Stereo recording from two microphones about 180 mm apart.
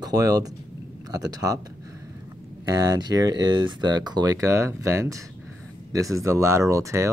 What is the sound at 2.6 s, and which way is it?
Speech, 20° right (ahead or behind).